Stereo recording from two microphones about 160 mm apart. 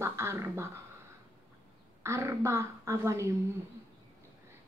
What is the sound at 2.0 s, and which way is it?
Beatboxing, 20° right (ahead or behind).